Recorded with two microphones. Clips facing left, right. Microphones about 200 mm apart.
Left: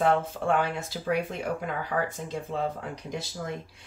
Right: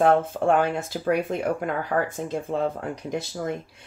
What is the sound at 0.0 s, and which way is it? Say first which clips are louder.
Speech: right 5 dB; 50° right (ahead or behind).